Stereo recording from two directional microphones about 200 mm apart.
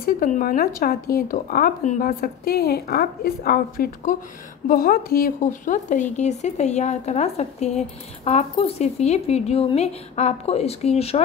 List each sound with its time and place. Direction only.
0.0 s speech: 45° left (ahead or behind)